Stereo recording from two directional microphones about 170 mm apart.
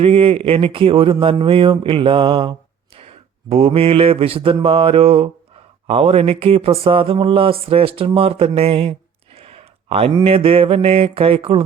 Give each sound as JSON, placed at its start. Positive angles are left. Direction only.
{"t": 0.0, "sound": "speech", "side_deg": -35}